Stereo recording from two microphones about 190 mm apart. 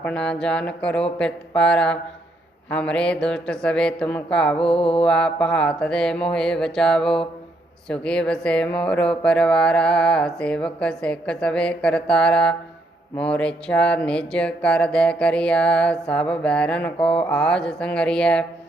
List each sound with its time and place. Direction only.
0.0 s speech: 5° left (ahead or behind)
4.7 s mantra: 30° left (ahead or behind)
4.9 s speech: 5° left (ahead or behind)